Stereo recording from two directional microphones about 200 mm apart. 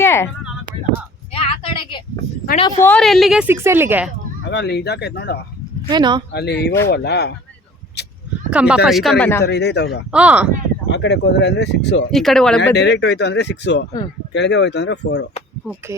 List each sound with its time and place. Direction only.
0.0 s a sound: 15° left (ahead or behind)
1.3 s a sound: 30° left (ahead or behind)
2.8 s a woman's voice: 5° left (ahead or behind)
4.4 s speech: 60° left (ahead or behind)
5.9 s speech: 20° right (ahead or behind)
6.3 s speech: 55° left (ahead or behind)
8.0 s a sound: 55° left (ahead or behind)
8.4 s a woman's voice: 5° right (ahead or behind)
9.4 s speech: 55° left (ahead or behind)
10.1 s speech: 5° right (ahead or behind)
10.8 s speech: 60° left (ahead or behind)
12.1 s a woman's voice: centre (ahead or behind)
12.6 s speech: 60° left (ahead or behind)
15.6 s speech: 10° right (ahead or behind)